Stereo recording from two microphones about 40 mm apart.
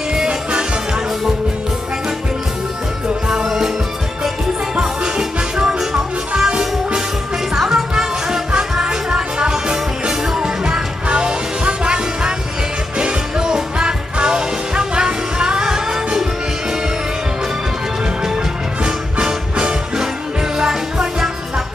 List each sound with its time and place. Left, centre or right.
0.1 s music: right
3.3 s music: centre
4.7 s music: right
7.5 s music: centre
18.9 s music: right